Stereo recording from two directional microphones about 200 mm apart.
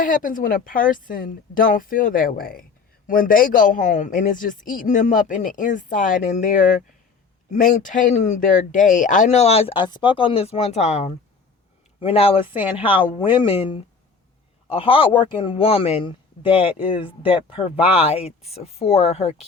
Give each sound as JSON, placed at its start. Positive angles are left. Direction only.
{"t": 0.0, "sound": "a man's voice", "side_deg": 45}